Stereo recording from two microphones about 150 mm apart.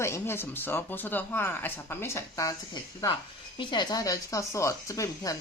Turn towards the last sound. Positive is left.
turn(degrees=20)  # may be behind; listen again after turning